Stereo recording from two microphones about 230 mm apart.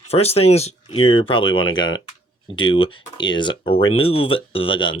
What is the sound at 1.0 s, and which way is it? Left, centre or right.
Speech, left.